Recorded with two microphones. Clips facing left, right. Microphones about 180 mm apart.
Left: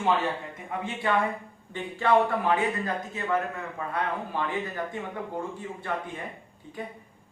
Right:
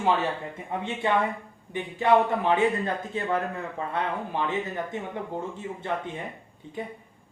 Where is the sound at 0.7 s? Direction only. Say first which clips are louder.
Right 2 dB; 25° right (ahead or behind).